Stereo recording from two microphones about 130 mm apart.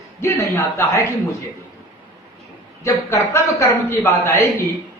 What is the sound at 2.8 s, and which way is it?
A man's voice, 20° left (ahead or behind).